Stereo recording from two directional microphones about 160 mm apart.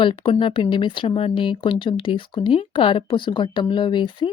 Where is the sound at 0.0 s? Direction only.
30° left (ahead or behind).